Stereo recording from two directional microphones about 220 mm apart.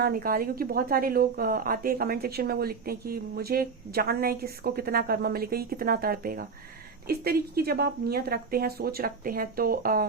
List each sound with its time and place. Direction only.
0.0 s speech: 40° right (ahead or behind)